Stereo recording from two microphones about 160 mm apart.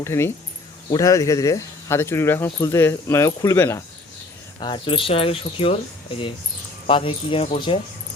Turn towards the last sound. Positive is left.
turn(degrees=35)  # may be behind; listen again after turning